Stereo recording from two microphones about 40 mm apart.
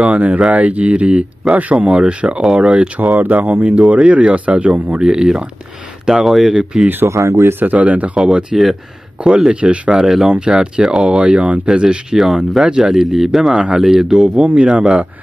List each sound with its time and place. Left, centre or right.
0.0 s speech: right
3.0 s speech: right; by 5.5 s centre
6.0 s speech: centre
6.5 s speech: centre
7.6 s speech: right
8.2 s speech: right
9.8 s speech: centre
12.9 s speech: centre